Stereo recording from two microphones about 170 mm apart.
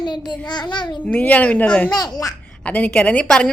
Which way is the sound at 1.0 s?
10° left (ahead or behind).